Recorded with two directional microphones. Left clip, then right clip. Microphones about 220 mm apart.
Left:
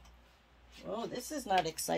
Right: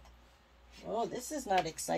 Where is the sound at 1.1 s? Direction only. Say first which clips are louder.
Even; 25° left (ahead or behind).